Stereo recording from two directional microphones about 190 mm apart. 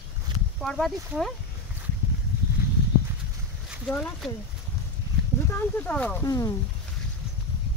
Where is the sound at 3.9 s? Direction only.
5° left (ahead or behind).